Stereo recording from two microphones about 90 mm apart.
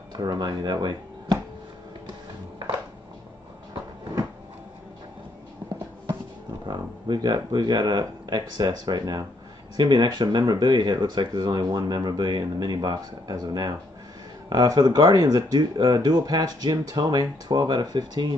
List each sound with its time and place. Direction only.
0.1 s speech: 50° right (ahead or behind)
6.6 s speech: 55° right (ahead or behind)